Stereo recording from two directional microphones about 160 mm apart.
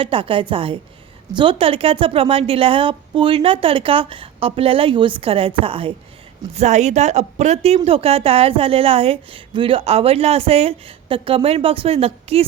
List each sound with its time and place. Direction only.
0.0 s a woman's voice: 35° right (ahead or behind)